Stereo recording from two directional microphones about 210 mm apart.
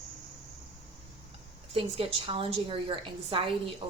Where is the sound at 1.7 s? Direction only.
25° right (ahead or behind).